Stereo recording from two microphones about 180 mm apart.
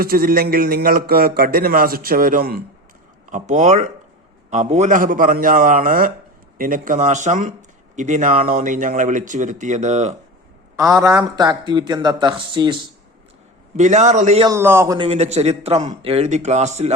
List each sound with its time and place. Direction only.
0.0 s a man's voice: 55° right (ahead or behind); by 10.2 s 40° right (ahead or behind)
10.8 s speech: 15° right (ahead or behind)
13.7 s a man's voice: 40° right (ahead or behind)
14.4 s a man's voice: 15° right (ahead or behind)
14.9 s a man's voice: 35° right (ahead or behind)